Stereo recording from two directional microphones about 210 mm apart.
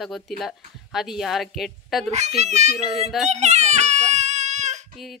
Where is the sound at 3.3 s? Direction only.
35° right (ahead or behind).